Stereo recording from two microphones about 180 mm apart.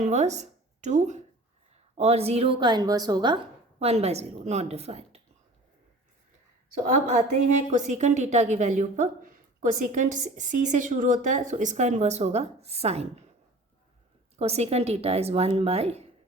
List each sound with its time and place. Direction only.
0.0 s a woman's voice: 40° right (ahead or behind); by 3.3 s 20° right (ahead or behind)
3.8 s speech: 35° right (ahead or behind)
7.4 s a woman's voice: 45° right (ahead or behind)
14.3 s speech: 35° right (ahead or behind)